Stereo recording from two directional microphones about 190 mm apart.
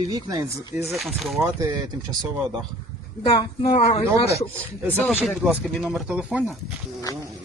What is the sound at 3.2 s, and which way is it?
Speech, 30° left (ahead or behind).